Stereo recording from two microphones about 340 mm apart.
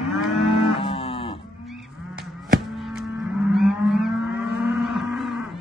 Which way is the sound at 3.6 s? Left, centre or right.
Centre.